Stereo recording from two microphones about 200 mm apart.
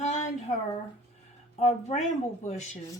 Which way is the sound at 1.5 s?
35° left (ahead or behind).